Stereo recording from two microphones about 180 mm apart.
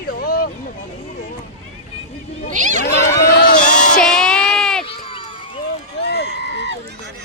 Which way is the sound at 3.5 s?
45° left (ahead or behind).